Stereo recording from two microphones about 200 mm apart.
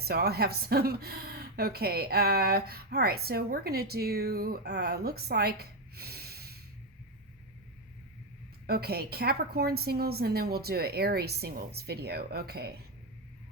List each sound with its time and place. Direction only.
0.0 s speech: 50° right (ahead or behind)
8.6 s speech: 50° right (ahead or behind)